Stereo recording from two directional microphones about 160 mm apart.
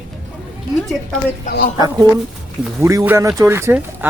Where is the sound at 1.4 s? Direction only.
65° left (ahead or behind).